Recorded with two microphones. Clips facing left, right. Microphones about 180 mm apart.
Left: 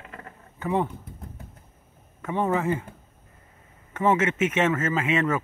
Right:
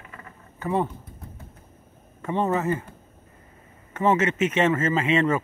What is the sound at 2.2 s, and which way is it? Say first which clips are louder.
Speech: right 1 dB; 10° left (ahead or behind).